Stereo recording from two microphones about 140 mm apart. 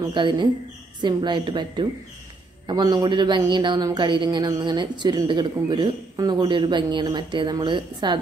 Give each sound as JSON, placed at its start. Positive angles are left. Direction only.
{"t": 0.0, "sound": "a man's voice", "side_deg": -35}